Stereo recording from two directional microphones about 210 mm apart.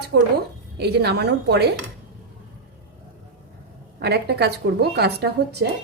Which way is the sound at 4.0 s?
50° right (ahead or behind).